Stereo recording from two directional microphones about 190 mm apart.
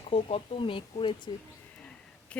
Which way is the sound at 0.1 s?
30° left (ahead or behind).